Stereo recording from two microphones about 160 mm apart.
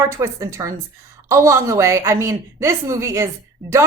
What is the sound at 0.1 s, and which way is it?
A woman's voice, 20° right (ahead or behind).